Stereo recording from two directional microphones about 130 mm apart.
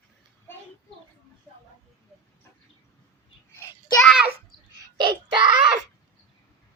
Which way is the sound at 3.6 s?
30° left (ahead or behind).